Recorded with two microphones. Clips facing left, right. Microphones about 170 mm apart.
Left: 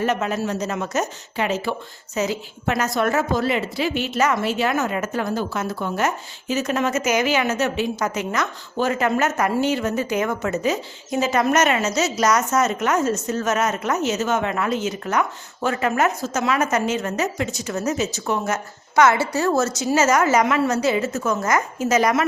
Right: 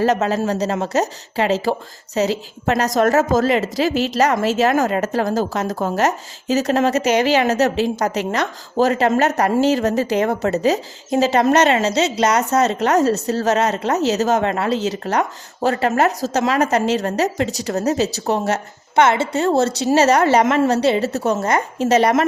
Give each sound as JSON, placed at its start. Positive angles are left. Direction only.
{"t": 0.0, "sound": "a woman's voice", "side_deg": -35}